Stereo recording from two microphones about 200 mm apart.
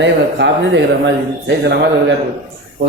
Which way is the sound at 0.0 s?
65° right (ahead or behind).